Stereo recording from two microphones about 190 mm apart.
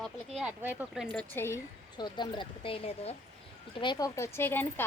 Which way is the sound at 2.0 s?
25° left (ahead or behind).